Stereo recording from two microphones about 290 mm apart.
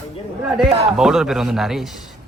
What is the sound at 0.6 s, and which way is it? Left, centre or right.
A man's voice, centre.